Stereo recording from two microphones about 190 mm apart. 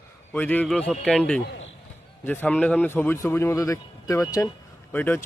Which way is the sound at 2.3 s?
10° left (ahead or behind).